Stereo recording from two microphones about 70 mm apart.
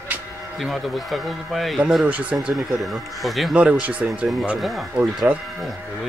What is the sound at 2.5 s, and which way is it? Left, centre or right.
Speech, centre.